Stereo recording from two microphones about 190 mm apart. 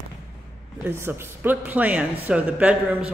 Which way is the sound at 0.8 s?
10° right (ahead or behind).